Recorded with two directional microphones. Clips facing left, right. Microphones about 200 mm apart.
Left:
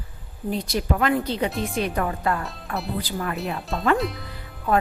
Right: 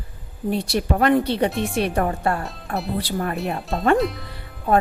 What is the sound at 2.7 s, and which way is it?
Speech, centre (ahead or behind).